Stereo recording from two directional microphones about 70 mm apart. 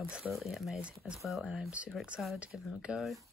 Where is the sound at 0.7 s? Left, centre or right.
Centre.